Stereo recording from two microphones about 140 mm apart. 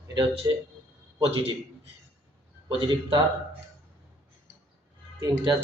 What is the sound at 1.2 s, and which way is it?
Speech, 45° right (ahead or behind).